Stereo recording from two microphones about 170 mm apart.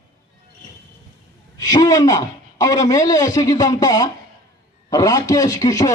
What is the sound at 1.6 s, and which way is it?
Speech, 20° left (ahead or behind).